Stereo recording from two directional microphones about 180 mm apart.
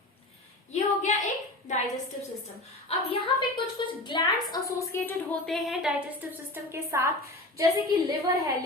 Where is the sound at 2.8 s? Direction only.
30° left (ahead or behind); by 5.1 s 15° left (ahead or behind).